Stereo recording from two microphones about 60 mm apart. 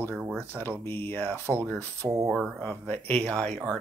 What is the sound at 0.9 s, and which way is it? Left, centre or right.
Speech, left.